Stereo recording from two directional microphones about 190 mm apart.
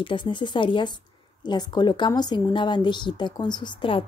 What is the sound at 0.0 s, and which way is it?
A woman's voice, 25° left (ahead or behind).